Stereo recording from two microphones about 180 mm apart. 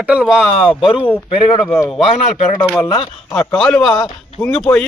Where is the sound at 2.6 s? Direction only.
15° left (ahead or behind).